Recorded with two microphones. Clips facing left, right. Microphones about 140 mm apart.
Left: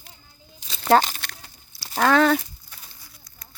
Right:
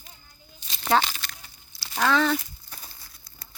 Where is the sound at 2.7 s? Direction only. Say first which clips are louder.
Right 2 dB; 35° right (ahead or behind).